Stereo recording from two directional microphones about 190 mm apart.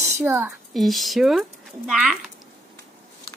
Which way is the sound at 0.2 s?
10° right (ahead or behind).